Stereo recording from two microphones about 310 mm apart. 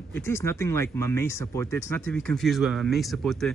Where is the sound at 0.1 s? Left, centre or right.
Centre.